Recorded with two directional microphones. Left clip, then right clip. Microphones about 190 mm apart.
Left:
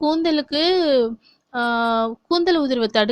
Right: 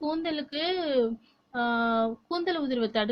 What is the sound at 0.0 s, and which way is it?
A woman's voice, 45° left (ahead or behind).